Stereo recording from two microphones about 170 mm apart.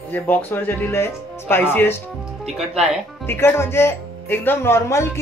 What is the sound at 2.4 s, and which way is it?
Speech, 5° right (ahead or behind).